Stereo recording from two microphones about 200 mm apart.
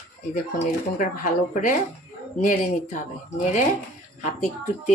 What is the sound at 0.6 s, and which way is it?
Speech, 40° left (ahead or behind).